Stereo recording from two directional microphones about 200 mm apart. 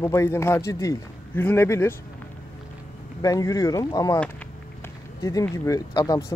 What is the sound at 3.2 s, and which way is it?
A man's voice, 15° left (ahead or behind).